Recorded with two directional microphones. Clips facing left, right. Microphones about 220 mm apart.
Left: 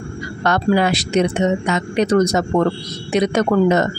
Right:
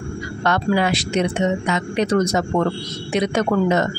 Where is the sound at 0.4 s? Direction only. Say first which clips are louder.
Left 3 dB; 40° left (ahead or behind).